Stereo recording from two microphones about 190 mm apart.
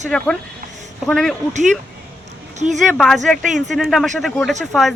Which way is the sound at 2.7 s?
Centre (ahead or behind).